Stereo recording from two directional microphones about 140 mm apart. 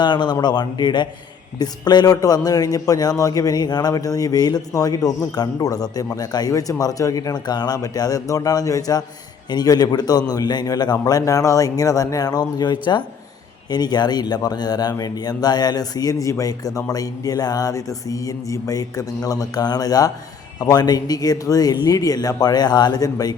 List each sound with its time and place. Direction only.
0.0 s a man's voice: 30° left (ahead or behind)